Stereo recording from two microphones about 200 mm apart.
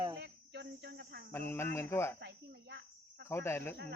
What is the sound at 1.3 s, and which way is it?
Speech, 10° left (ahead or behind).